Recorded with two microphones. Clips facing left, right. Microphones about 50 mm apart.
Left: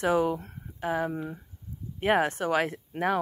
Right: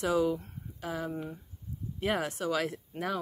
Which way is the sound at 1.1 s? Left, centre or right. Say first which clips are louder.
Left 3 dB; left.